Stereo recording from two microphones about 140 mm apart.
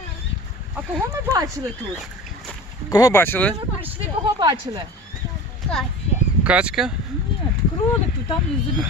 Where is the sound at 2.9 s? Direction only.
25° left (ahead or behind).